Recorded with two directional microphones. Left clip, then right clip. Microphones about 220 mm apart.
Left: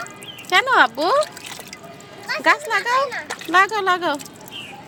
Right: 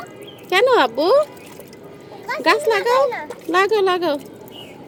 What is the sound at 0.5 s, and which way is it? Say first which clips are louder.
Speech: right 1 dB; 30° left (ahead or behind).